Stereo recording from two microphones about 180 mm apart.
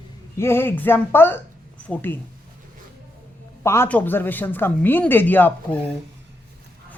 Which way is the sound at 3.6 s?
15° left (ahead or behind).